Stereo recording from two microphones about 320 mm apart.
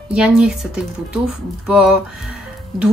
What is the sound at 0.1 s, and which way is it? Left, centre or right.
Speech, centre.